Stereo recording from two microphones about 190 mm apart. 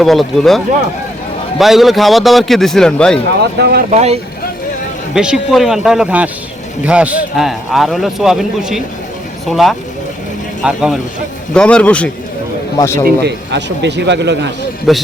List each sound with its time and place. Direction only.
0.0 s a man's voice: centre (ahead or behind)
3.6 s speech: 55° right (ahead or behind)
3.9 s speech: 35° right (ahead or behind)
5.1 s a man's voice: 5° right (ahead or behind); by 13.0 s 15° left (ahead or behind)
13.2 s a man's voice: 65° right (ahead or behind)
14.9 s a man's voice: centre (ahead or behind)